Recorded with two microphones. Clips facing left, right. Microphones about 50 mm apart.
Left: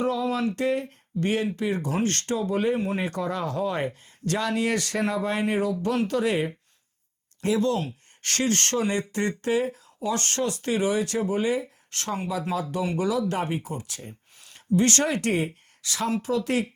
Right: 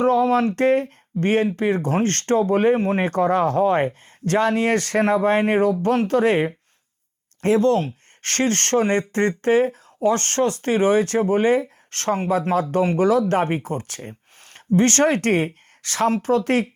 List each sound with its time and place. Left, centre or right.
0.0 s speech: right